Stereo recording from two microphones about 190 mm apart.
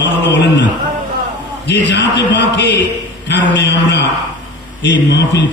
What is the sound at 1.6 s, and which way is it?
A man's voice, 65° left (ahead or behind).